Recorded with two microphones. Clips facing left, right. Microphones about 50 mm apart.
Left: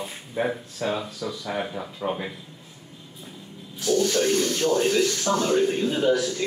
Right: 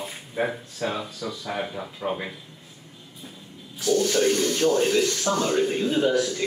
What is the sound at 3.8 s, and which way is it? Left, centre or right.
A man's voice, centre.